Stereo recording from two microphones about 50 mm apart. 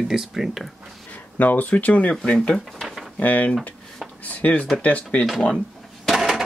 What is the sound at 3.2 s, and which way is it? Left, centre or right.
Speech, left.